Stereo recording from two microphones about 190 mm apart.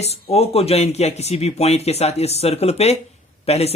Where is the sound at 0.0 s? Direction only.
35° left (ahead or behind).